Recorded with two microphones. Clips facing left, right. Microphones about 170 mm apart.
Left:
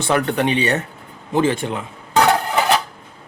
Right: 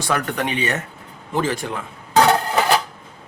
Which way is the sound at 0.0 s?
25° left (ahead or behind).